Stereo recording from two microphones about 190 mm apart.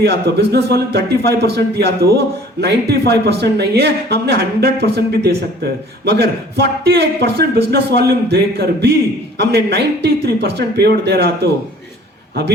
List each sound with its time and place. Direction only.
0.0 s speech: 55° right (ahead or behind)